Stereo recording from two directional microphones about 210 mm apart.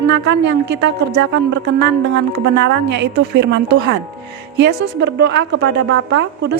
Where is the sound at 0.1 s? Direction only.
55° right (ahead or behind).